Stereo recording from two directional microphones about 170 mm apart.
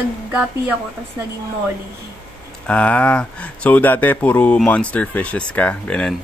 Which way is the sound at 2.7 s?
10° left (ahead or behind).